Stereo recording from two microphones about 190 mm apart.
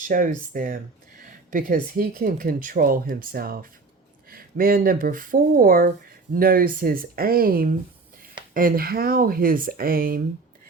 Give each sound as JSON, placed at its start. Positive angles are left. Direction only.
{"t": 0.0, "sound": "speech", "side_deg": -45}